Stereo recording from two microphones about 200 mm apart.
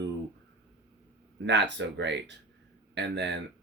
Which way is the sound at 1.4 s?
60° right (ahead or behind).